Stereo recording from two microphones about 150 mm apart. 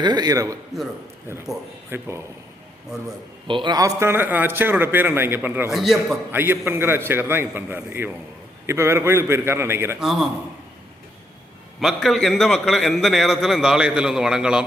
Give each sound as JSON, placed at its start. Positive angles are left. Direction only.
{"t": 0.0, "sound": "a man's voice", "side_deg": -30}
{"t": 1.9, "sound": "a man's voice", "side_deg": -15}
{"t": 3.4, "sound": "a man's voice", "side_deg": -30}
{"t": 5.7, "sound": "a man's voice", "side_deg": 0}
{"t": 6.3, "sound": "a man's voice", "side_deg": -15}
{"t": 10.0, "sound": "a man's voice", "side_deg": -5}
{"t": 11.8, "sound": "a man's voice", "side_deg": 0}